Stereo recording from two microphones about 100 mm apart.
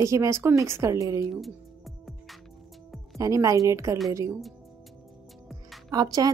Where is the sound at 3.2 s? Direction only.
35° right (ahead or behind).